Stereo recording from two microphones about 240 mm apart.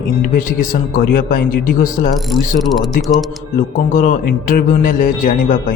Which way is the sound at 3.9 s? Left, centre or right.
Left.